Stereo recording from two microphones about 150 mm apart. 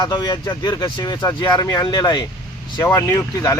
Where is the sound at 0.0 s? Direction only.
25° left (ahead or behind).